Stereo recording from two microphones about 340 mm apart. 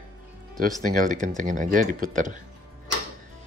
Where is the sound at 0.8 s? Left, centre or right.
Right.